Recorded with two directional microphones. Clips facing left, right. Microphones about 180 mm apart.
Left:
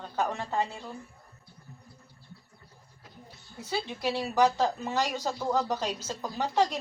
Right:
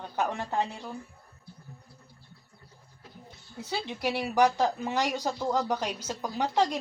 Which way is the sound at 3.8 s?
15° right (ahead or behind).